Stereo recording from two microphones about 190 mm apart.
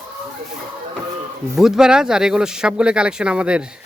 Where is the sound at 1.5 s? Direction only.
Centre (ahead or behind).